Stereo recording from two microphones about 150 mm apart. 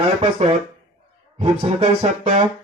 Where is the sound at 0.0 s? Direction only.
45° right (ahead or behind).